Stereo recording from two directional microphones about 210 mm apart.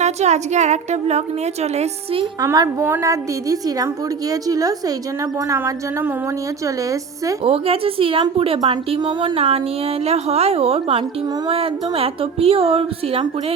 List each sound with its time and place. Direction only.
0.0 s speech: 35° right (ahead or behind)
2.4 s a woman's voice: 15° right (ahead or behind)
7.4 s a woman's voice: 25° right (ahead or behind)